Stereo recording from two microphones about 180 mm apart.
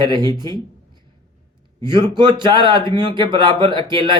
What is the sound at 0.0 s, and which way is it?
Speech, 25° right (ahead or behind).